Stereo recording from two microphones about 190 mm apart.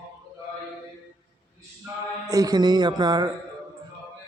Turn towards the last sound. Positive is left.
turn(degrees=-20)  # may be behind; listen again after turning